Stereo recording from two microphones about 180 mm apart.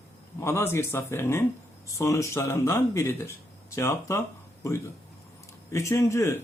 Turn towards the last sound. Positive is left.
turn(degrees=15)  # may be behind; listen again after turning